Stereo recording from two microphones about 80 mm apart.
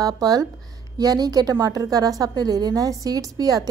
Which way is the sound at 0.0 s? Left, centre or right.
Right.